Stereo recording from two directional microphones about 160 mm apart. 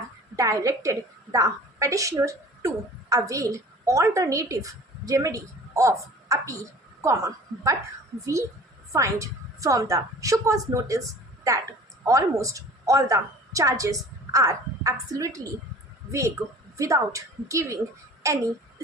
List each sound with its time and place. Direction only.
0.3 s a woman's voice: 20° right (ahead or behind)
12.0 s a woman's voice: 20° right (ahead or behind)
16.7 s a woman's voice: 20° right (ahead or behind)